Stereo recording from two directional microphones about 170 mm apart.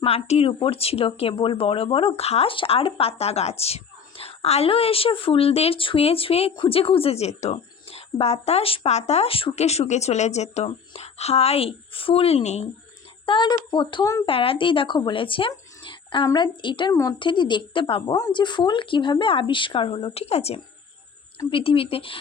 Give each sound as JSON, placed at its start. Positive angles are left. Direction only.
{"t": 0.0, "sound": "speech", "side_deg": 35}
{"t": 13.2, "sound": "a woman's voice", "side_deg": 30}
{"t": 14.3, "sound": "a woman's voice", "side_deg": 30}